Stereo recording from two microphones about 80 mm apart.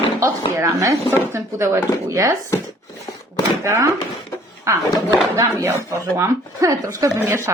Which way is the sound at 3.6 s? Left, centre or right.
Right.